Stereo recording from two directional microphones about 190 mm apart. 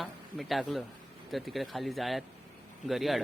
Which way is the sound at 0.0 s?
Centre (ahead or behind).